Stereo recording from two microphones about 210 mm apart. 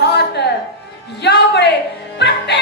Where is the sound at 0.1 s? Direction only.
50° left (ahead or behind).